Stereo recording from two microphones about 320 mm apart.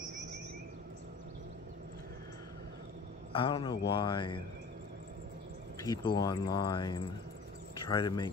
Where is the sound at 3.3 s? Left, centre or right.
Centre.